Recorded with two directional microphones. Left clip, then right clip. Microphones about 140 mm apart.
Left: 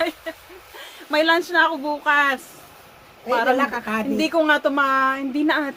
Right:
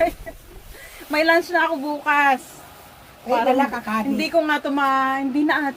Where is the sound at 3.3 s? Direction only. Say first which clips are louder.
Right 1 dB; 50° left (ahead or behind).